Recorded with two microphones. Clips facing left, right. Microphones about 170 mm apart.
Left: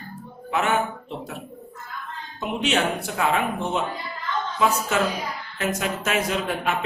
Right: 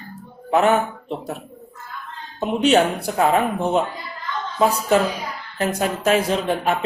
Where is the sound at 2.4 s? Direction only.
35° right (ahead or behind).